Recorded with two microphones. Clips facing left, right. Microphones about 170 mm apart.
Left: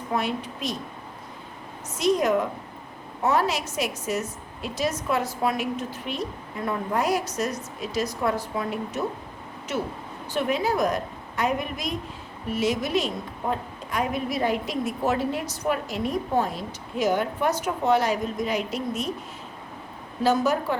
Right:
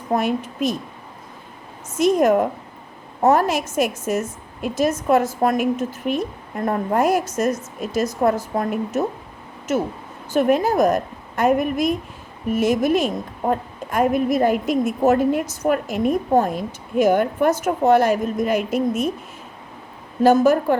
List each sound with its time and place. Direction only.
0.1 s a woman's voice: 45° right (ahead or behind)
1.9 s a woman's voice: 50° right (ahead or behind)
10.3 s a woman's voice: 50° right (ahead or behind)
20.2 s a woman's voice: 50° right (ahead or behind)